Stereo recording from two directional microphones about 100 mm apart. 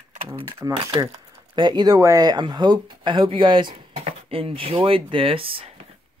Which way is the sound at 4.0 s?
80° right.